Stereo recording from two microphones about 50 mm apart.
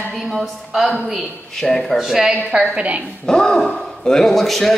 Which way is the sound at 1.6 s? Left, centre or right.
Centre.